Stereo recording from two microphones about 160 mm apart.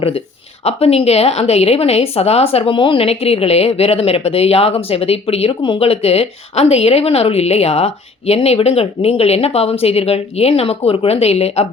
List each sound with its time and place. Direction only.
0.6 s a woman's voice: 40° left (ahead or behind)